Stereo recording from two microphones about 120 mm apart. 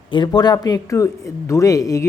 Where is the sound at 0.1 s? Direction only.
40° left (ahead or behind).